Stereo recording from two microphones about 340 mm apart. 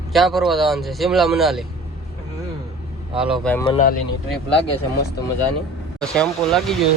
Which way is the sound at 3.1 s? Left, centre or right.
Centre.